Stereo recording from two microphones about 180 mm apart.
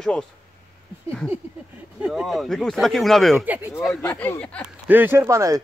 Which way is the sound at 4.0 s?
10° left (ahead or behind).